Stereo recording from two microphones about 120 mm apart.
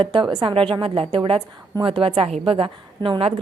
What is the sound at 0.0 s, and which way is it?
A woman's voice, 45° right (ahead or behind).